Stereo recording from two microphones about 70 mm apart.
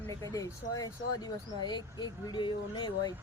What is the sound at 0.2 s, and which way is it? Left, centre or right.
Speech, left.